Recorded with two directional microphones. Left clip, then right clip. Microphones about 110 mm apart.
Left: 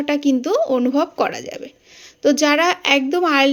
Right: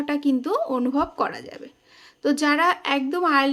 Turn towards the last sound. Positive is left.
turn(degrees=15)  # may be behind; listen again after turning